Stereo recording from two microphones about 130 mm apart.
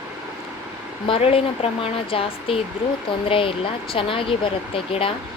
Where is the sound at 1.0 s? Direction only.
45° left (ahead or behind).